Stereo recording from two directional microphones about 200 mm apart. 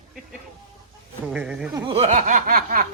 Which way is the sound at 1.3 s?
5° right (ahead or behind).